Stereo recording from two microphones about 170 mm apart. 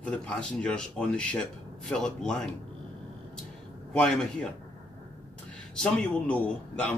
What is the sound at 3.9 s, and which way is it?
Speech, 5° left (ahead or behind).